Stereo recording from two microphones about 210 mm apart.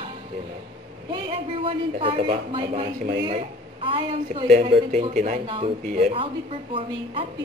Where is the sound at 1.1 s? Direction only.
25° right (ahead or behind).